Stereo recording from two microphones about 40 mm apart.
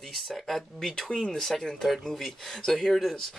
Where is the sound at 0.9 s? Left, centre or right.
Centre.